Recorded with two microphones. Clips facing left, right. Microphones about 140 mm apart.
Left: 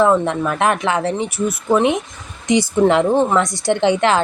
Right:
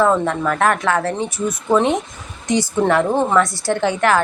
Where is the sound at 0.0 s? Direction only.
15° left (ahead or behind).